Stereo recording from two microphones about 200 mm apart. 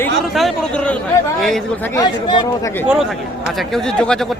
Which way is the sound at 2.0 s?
20° left (ahead or behind).